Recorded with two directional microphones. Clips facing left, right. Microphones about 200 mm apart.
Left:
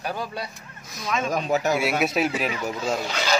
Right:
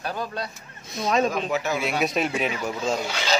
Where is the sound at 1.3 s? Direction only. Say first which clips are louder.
Left 3 dB; 45° left (ahead or behind).